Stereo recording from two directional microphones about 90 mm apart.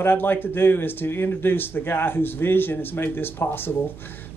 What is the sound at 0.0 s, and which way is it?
Speech, 25° left (ahead or behind).